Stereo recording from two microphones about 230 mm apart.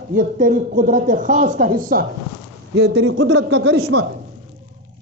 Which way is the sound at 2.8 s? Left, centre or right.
Right.